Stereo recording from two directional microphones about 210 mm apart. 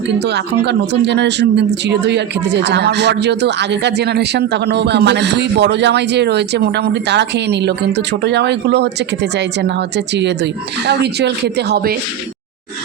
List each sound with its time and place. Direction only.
0.3 s speech: 55° right (ahead or behind)